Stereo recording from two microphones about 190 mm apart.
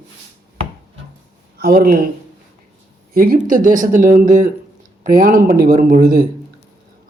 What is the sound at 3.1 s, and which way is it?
Speech, 50° right (ahead or behind).